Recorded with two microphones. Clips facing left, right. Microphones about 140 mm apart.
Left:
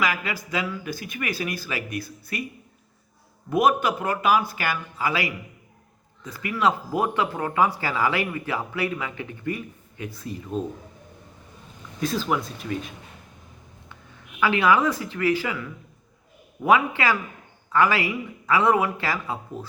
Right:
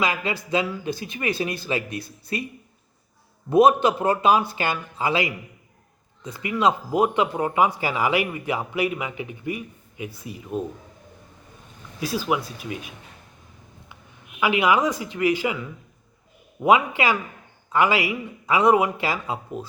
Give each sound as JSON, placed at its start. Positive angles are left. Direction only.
{"t": 0.0, "sound": "speech", "side_deg": -25}
{"t": 3.5, "sound": "speech", "side_deg": -25}
{"t": 11.9, "sound": "speech", "side_deg": -10}
{"t": 14.3, "sound": "speech", "side_deg": -15}